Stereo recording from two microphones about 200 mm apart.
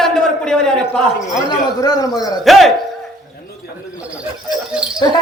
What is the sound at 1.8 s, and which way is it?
Speech, 20° left (ahead or behind).